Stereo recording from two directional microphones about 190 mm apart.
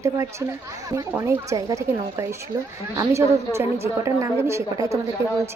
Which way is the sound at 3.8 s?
15° right (ahead or behind).